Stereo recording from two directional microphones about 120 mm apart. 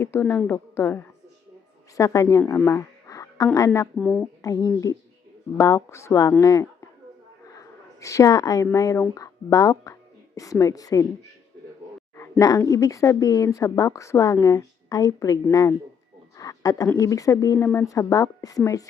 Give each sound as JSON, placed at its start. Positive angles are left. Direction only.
{"t": 0.0, "sound": "speech", "side_deg": 20}
{"t": 2.6, "sound": "a sound", "side_deg": 25}
{"t": 3.9, "sound": "speech", "side_deg": 10}
{"t": 4.4, "sound": "speech", "side_deg": 30}
{"t": 7.5, "sound": "a sound", "side_deg": 30}
{"t": 8.7, "sound": "speech", "side_deg": 25}
{"t": 12.4, "sound": "speech", "side_deg": 30}
{"t": 16.4, "sound": "a sound", "side_deg": 30}
{"t": 17.0, "sound": "speech", "side_deg": 25}